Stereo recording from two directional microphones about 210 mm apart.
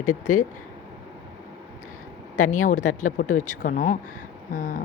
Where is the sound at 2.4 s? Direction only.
35° left (ahead or behind).